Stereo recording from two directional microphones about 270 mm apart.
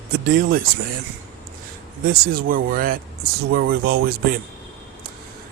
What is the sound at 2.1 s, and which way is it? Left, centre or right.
Speech, right.